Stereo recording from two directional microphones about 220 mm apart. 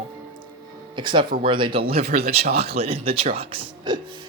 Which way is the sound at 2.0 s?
45° right (ahead or behind).